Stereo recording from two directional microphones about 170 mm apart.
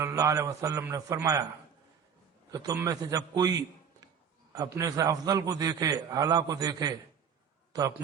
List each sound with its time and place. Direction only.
0.0 s a man's voice: 15° right (ahead or behind)
2.5 s a man's voice: 20° right (ahead or behind)
4.5 s a man's voice: 20° right (ahead or behind)